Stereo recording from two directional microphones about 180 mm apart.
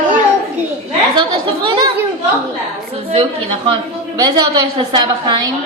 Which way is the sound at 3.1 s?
30° right (ahead or behind).